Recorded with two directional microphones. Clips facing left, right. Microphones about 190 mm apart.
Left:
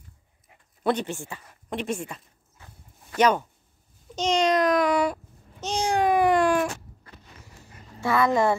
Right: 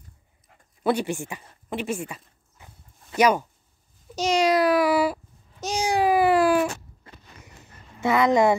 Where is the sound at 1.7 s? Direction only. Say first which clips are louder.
Right 1 dB; 5° right (ahead or behind).